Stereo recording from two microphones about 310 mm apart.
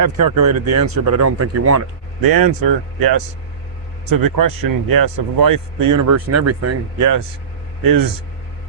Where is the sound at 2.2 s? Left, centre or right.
Right.